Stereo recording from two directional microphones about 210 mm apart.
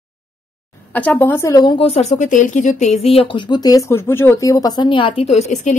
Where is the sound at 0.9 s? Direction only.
10° left (ahead or behind).